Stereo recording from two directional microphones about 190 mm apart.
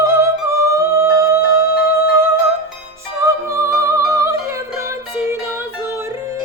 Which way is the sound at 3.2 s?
15° right (ahead or behind).